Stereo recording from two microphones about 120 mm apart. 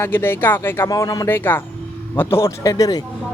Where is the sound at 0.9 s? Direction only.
30° left (ahead or behind).